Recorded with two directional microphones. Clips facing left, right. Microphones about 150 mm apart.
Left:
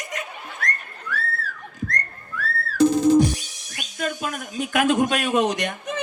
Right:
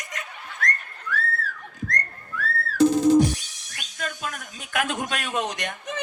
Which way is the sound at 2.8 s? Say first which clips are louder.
Left 1 dB; 15° left (ahead or behind).